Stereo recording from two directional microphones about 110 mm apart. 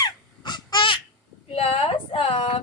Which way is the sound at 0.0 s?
40° left (ahead or behind).